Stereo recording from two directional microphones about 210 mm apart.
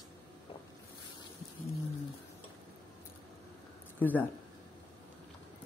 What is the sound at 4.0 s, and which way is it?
Speech, 10° left (ahead or behind).